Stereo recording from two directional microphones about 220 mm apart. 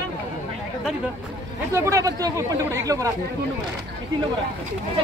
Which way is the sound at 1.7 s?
15° right (ahead or behind).